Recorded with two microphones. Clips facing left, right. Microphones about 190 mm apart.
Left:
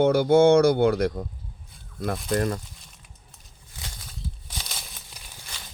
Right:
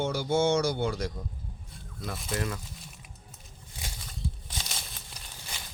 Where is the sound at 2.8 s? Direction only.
5° right (ahead or behind).